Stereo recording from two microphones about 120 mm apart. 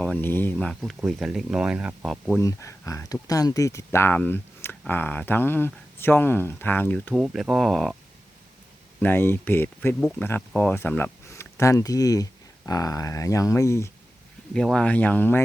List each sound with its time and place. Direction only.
0.0 s speech: 10° left (ahead or behind)
0.5 s speech: 5° left (ahead or behind)
2.0 s speech: centre (ahead or behind)
2.4 s speech: 25° left (ahead or behind)
7.1 s speech: 5° right (ahead or behind)
9.0 s speech: 15° left (ahead or behind)
14.5 s speech: 5° left (ahead or behind)